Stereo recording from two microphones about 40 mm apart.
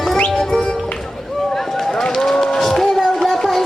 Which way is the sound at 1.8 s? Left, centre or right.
Centre.